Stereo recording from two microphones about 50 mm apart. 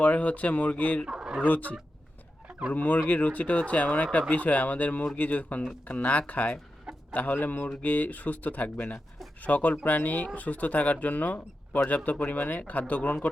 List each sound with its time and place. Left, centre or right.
0.0 s speech: left
1.0 s a sound: centre
1.5 s speech: left
2.7 s speech: left